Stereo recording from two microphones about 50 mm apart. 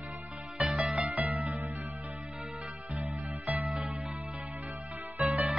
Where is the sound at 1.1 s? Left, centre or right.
Right.